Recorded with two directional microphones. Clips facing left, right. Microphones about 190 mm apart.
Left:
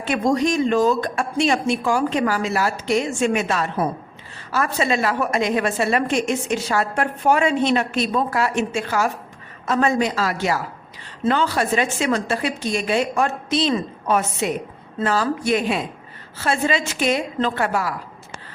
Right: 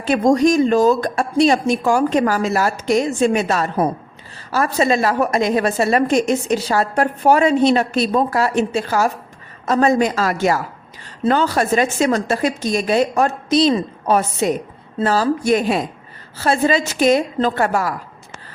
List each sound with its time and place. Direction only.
0.0 s a woman's voice: 40° right (ahead or behind)